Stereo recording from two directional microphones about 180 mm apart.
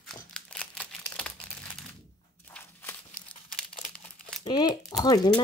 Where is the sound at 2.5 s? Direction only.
10° left (ahead or behind).